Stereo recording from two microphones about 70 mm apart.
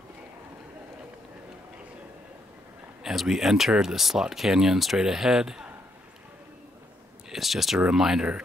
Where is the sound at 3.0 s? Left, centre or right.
Centre.